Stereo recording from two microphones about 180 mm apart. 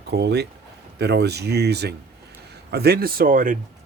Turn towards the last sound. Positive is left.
turn(degrees=-50)  # may be behind; listen again after turning